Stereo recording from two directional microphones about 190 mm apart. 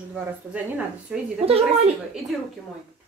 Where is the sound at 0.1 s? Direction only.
5° right (ahead or behind).